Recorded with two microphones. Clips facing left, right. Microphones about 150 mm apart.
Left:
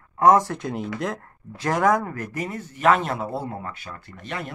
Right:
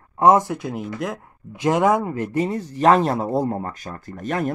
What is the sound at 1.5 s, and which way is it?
Speech, 20° right (ahead or behind).